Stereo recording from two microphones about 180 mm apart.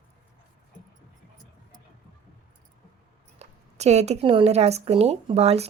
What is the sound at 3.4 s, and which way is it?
Speech, 40° right (ahead or behind).